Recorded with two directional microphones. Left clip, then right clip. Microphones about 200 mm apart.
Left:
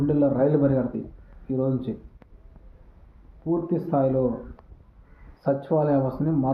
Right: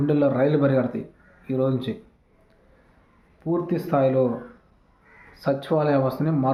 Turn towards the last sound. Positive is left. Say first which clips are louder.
# right 2 dB
turn(degrees=-25)  # may be behind; listen again after turning